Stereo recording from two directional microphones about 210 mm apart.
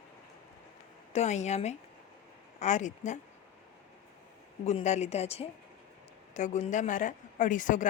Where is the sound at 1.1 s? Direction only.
35° left (ahead or behind).